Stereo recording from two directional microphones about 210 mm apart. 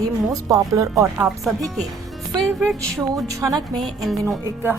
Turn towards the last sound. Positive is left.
turn(degrees=-5)  # may be behind; listen again after turning